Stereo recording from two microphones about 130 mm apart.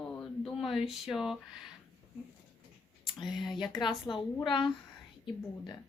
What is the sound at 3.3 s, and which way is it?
A woman's voice, 35° left (ahead or behind).